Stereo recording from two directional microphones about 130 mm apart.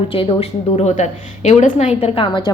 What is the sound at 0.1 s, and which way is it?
A woman's voice, 45° left (ahead or behind).